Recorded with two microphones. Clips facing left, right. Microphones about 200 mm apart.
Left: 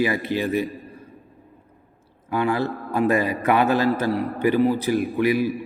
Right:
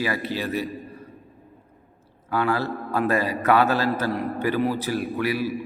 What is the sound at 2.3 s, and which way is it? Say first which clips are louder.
A man's voice: left 2 dB; 15° left (ahead or behind).